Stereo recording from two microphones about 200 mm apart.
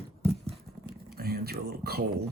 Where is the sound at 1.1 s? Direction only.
50° right (ahead or behind).